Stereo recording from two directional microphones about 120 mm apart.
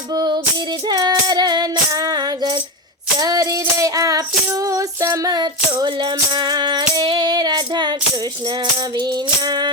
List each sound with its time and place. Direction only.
0.9 s female singing: 35° right (ahead or behind)
2.0 s music: 35° right (ahead or behind)
3.2 s child singing: 30° right (ahead or behind)
4.7 s music: 25° right (ahead or behind)